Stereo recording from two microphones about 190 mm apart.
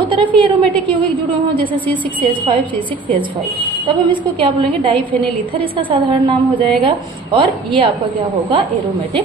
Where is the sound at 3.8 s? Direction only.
25° right (ahead or behind).